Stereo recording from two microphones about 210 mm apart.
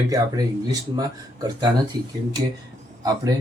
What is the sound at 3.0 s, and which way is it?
Speech, 15° right (ahead or behind).